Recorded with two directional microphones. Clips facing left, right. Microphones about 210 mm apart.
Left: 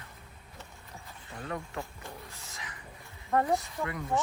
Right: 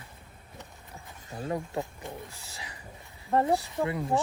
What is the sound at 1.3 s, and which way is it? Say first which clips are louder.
Speech: right 5 dB; 35° right (ahead or behind).